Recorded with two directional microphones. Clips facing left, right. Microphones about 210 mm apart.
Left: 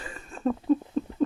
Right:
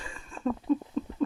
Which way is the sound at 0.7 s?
45° left (ahead or behind).